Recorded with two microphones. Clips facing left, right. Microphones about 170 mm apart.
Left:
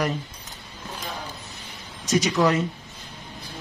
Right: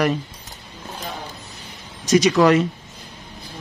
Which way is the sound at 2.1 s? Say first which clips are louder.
Right 6 dB; 90° right.